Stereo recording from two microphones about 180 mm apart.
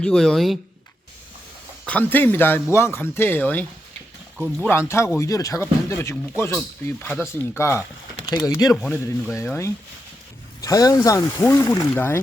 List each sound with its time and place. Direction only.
0.0 s speech: 5° left (ahead or behind)
1.9 s speech: 10° left (ahead or behind)
8.7 s speech: 5° left (ahead or behind)